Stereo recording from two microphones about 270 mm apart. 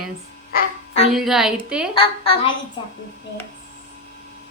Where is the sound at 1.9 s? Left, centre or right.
Centre.